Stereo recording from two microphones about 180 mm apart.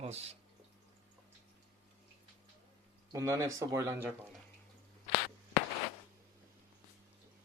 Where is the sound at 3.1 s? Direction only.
15° right (ahead or behind).